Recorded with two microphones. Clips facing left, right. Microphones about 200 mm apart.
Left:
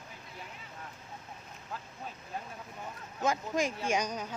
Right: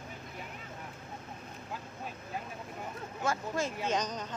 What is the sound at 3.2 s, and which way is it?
Speech, 15° left (ahead or behind).